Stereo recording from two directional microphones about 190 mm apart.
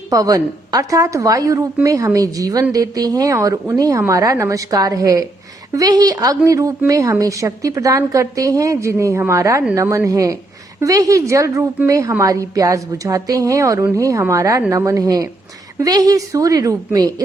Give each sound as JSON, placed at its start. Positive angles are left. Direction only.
{"t": 0.1, "sound": "a woman's voice", "side_deg": -20}